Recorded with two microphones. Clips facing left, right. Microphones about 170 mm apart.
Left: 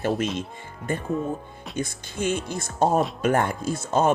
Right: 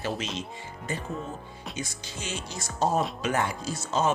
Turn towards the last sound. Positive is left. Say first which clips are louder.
# left 5 dB
turn(degrees=55)  # may be behind; listen again after turning